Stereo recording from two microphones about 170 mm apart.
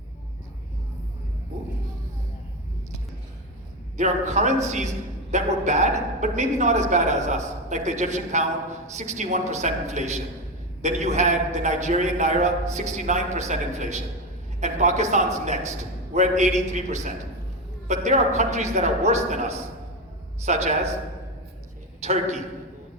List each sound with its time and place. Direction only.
3.9 s a man's voice: 45° right (ahead or behind)
16.1 s a man's voice: 45° right (ahead or behind)
22.0 s a man's voice: 40° right (ahead or behind)